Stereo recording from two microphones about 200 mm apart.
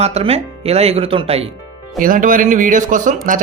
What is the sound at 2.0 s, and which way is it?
Speech, 40° right (ahead or behind).